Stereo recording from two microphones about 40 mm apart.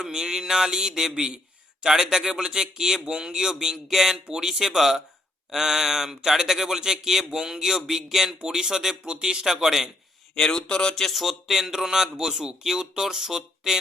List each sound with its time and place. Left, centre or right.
0.0 s speech: centre
10.3 s speech: centre
11.0 s speech: centre